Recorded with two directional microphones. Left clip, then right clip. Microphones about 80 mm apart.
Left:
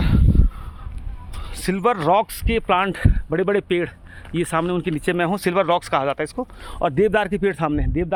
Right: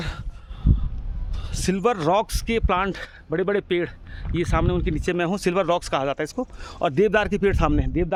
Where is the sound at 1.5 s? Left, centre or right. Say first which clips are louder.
Left 2 dB; right.